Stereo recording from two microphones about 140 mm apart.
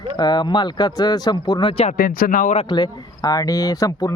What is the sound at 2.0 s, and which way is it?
Speech, 90° left.